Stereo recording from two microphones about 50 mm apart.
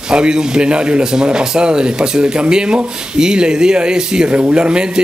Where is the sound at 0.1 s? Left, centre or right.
Centre.